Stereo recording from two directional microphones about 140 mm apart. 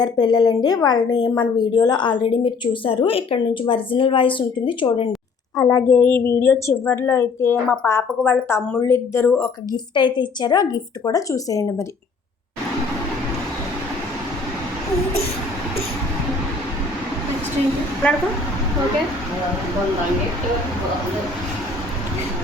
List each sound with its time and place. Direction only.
0.0 s a woman's voice: 30° left (ahead or behind)
5.5 s a woman's voice: 20° left (ahead or behind)
9.7 s a woman's voice: 35° left (ahead or behind)